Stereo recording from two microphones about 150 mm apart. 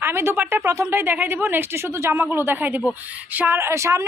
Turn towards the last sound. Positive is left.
turn(degrees=-20)  # may be behind; listen again after turning